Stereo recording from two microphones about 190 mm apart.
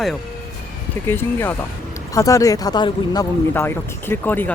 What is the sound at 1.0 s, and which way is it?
Speech, 10° left (ahead or behind).